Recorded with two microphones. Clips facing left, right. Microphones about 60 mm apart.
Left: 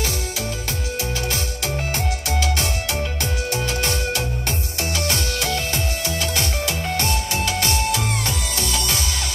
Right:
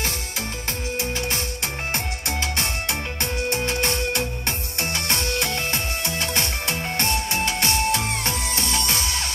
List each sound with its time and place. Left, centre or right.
2.0 s music: right